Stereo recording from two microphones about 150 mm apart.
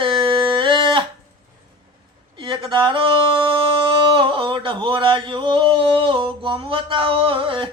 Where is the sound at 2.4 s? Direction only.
35° right (ahead or behind).